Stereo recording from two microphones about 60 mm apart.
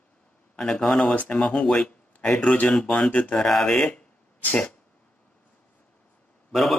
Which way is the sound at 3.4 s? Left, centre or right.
Centre.